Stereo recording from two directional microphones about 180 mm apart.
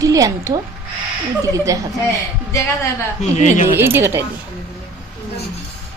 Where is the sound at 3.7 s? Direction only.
15° right (ahead or behind).